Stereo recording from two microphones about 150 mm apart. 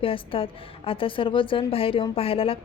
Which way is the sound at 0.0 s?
35° left (ahead or behind).